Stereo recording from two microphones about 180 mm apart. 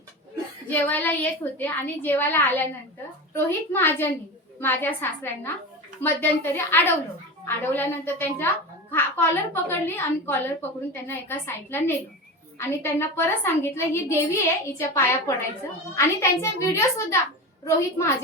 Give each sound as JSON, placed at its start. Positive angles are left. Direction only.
{"t": 0.7, "sound": "a woman's voice", "side_deg": 10}